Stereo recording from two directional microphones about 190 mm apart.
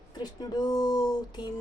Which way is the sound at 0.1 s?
20° left (ahead or behind).